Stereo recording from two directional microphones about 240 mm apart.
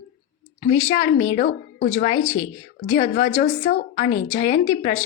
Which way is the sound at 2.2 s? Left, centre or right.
Centre.